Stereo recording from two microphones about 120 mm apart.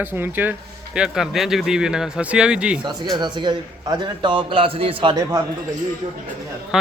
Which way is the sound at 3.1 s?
40° right (ahead or behind).